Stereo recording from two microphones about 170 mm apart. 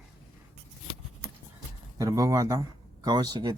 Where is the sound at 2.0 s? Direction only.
20° right (ahead or behind).